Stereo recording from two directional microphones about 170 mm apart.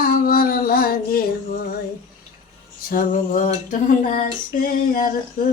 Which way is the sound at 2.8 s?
55° left (ahead or behind).